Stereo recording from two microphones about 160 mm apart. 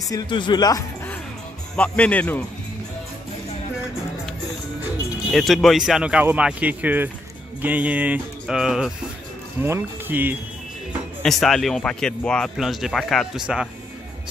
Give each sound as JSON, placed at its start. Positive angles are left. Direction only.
{"t": 0.1, "sound": "speech", "side_deg": 30}
{"t": 1.8, "sound": "speech", "side_deg": 10}
{"t": 5.3, "sound": "speech", "side_deg": 0}
{"t": 9.6, "sound": "speech", "side_deg": -15}
{"t": 11.2, "sound": "speech", "side_deg": 0}